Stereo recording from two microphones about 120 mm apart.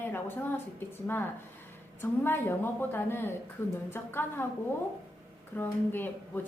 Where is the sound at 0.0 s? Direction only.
15° left (ahead or behind).